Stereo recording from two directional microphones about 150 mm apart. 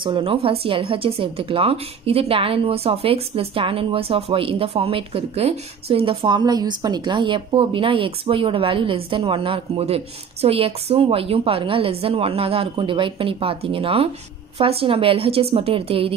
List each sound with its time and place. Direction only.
0.0 s speech: 35° right (ahead or behind)